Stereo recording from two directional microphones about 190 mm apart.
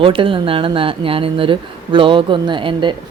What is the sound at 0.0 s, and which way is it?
Speech, 25° right (ahead or behind).